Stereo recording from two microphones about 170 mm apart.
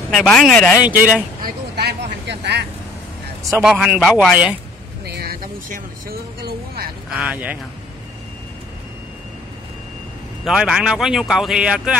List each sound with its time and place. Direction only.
0.1 s speech: 5° left (ahead or behind)
0.8 s speech: 10° right (ahead or behind)
1.4 s speech: 70° right (ahead or behind); by 2.6 s 90° right
3.6 s speech: 5° right (ahead or behind)
5.0 s vehicle: 60° right (ahead or behind)
7.2 s speech: 10° right (ahead or behind)
10.4 s speech: 5° right (ahead or behind)